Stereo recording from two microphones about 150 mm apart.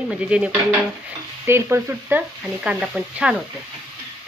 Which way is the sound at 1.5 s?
15° right (ahead or behind).